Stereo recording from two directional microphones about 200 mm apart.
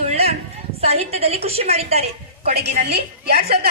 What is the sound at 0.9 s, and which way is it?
Speech, 30° right (ahead or behind).